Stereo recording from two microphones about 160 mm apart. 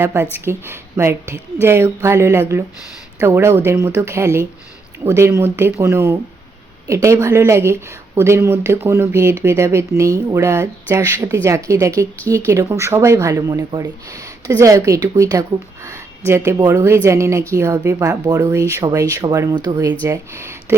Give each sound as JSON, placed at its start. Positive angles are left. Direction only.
{"t": 0.0, "sound": "speech", "side_deg": -15}